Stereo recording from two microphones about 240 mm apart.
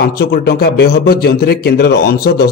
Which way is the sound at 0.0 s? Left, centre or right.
Left.